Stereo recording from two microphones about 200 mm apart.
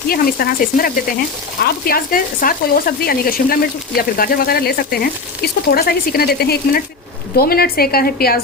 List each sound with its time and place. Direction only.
0.1 s frying: 45° left (ahead or behind)